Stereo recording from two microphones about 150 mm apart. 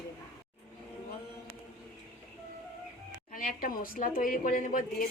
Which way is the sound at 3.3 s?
70° left (ahead or behind).